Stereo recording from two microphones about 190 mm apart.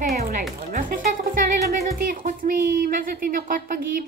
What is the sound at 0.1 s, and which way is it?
Music, 50° right (ahead or behind).